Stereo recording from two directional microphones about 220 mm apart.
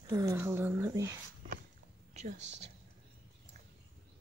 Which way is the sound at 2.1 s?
30° right (ahead or behind).